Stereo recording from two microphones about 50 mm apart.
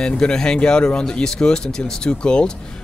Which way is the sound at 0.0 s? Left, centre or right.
Centre.